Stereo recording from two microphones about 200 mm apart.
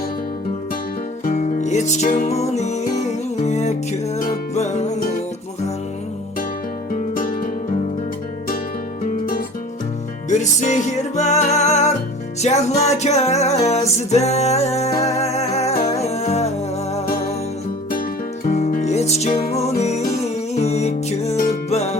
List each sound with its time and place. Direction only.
1.2 s music: 40° left (ahead or behind)
6.9 s music: 45° left (ahead or behind)
10.2 s music: 35° left (ahead or behind)
18.4 s music: 40° left (ahead or behind)